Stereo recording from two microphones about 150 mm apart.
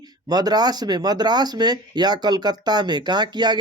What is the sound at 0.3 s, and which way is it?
Speech, 25° right (ahead or behind).